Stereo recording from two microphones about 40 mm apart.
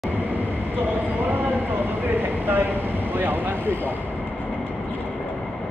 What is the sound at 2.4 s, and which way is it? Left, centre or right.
Vehicle, right.